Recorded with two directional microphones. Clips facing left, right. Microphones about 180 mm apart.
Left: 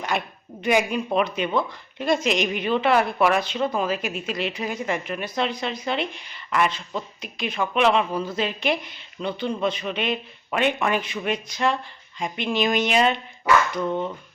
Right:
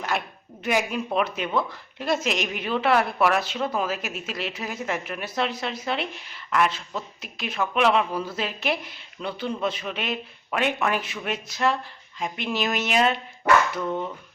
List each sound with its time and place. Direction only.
0.1 s a woman's voice: centre (ahead or behind)